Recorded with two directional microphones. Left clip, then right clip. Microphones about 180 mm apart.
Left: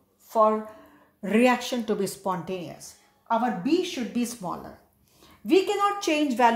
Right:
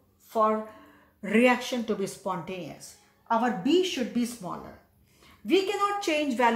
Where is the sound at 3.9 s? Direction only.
35° left (ahead or behind).